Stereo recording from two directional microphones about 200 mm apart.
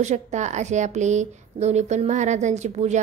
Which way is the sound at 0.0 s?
35° right (ahead or behind).